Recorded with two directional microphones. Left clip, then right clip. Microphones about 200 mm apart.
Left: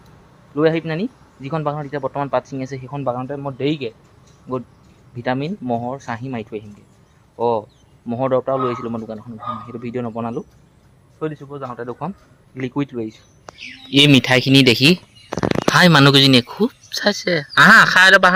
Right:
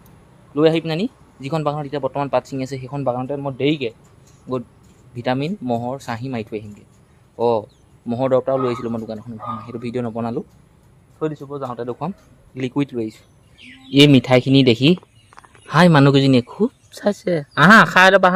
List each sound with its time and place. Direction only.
0.5 s speech: 10° right (ahead or behind)
5.1 s speech: 10° right (ahead or behind)
13.9 s speech: 5° right (ahead or behind)